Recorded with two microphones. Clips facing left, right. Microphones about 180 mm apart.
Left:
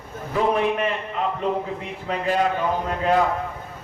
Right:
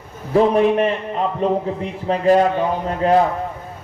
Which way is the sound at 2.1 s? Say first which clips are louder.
Right 8 dB; 40° right (ahead or behind).